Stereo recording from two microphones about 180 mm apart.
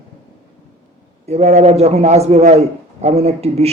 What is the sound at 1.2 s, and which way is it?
A man's voice, 35° right (ahead or behind).